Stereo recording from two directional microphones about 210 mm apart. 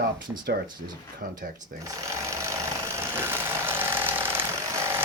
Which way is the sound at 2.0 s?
15° right (ahead or behind).